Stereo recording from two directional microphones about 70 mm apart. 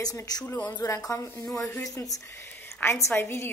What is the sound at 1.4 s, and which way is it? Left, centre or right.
Speech, centre.